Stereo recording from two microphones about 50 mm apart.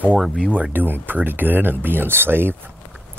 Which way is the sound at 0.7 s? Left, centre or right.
Right.